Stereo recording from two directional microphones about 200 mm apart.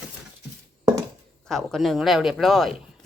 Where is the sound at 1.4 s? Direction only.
Centre (ahead or behind).